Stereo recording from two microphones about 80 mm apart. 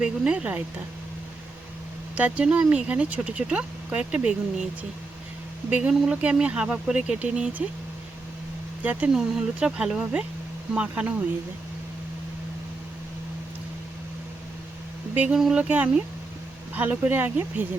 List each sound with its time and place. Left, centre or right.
0.0 s speech: centre
2.1 s speech: centre
5.9 s speech: centre
8.8 s speech: right
9.1 s speech: centre
15.1 s speech: centre